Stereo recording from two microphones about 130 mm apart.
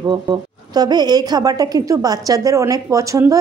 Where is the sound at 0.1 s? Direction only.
35° right (ahead or behind).